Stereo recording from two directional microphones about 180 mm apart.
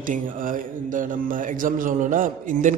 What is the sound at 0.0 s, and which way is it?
Speech, 50° right (ahead or behind).